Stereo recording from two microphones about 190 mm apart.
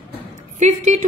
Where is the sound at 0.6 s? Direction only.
40° right (ahead or behind).